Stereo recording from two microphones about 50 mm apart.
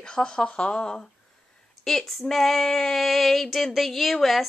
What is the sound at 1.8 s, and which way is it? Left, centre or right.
Female singing, centre.